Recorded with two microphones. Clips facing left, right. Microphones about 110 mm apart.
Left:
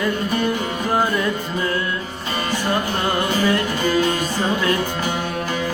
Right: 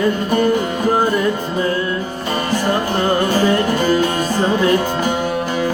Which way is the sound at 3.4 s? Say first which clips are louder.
Right 4 dB; 35° right (ahead or behind).